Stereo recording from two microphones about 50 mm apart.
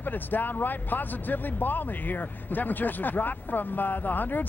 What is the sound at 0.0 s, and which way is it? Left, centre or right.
Speech, left.